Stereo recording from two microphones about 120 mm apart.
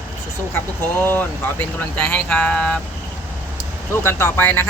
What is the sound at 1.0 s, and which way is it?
Speech, 15° left (ahead or behind).